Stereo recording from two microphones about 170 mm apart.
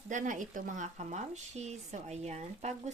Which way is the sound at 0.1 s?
50° right (ahead or behind).